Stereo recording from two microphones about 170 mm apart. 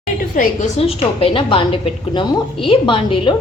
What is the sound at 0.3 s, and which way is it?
Speech, 55° left (ahead or behind).